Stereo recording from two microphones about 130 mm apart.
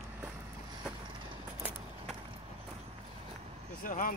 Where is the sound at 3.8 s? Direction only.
90° left.